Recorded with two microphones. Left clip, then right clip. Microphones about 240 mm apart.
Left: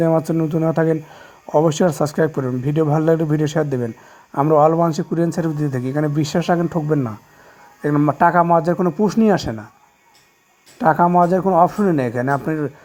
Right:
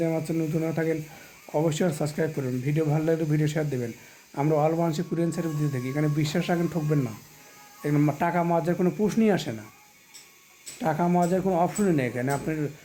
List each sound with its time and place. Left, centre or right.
0.0 s speech: left
10.8 s speech: left